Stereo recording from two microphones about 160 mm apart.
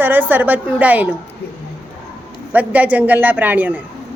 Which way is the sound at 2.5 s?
10° right (ahead or behind).